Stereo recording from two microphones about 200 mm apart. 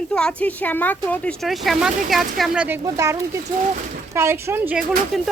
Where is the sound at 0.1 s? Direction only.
5° left (ahead or behind).